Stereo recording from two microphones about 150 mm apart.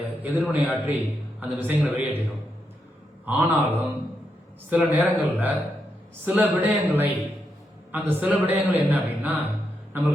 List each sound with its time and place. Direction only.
0.0 s a man's voice: 10° right (ahead or behind)
3.2 s a man's voice: 10° right (ahead or behind)
4.7 s a man's voice: 15° right (ahead or behind)